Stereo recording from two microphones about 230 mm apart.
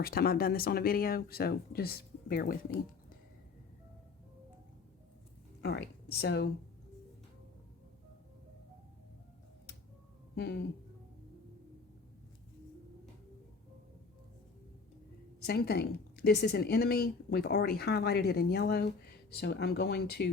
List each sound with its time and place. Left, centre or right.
0.0 s speech: left
5.6 s speech: left
10.3 s speech: left
15.4 s a woman's voice: left